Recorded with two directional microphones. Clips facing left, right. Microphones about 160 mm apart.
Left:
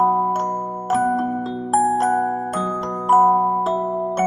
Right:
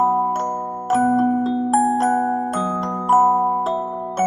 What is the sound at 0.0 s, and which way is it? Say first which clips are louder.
Glockenspiel: even; centre (ahead or behind).